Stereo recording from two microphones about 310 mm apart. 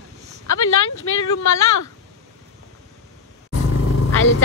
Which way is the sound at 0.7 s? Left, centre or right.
Left.